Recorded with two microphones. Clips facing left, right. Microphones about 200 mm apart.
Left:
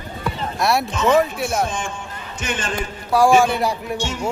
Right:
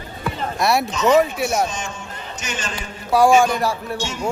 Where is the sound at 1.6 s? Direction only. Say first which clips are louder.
Left 1 dB; 55° left (ahead or behind).